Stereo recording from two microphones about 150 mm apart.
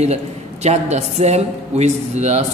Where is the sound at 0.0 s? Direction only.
45° right (ahead or behind).